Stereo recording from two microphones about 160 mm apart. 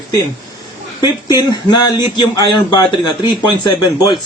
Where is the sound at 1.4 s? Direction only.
25° left (ahead or behind).